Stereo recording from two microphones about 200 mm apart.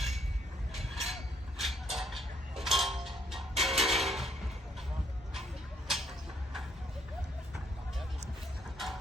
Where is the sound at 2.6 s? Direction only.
Centre (ahead or behind).